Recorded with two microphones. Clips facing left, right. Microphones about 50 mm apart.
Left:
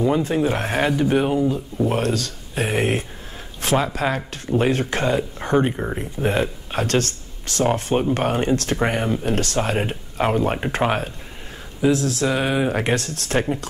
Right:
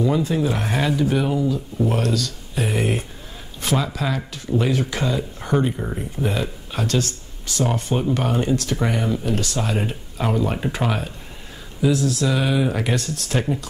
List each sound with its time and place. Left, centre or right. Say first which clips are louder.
0.0 s speech: left 1 dB; left
6.2 s speech: left 4 dB; left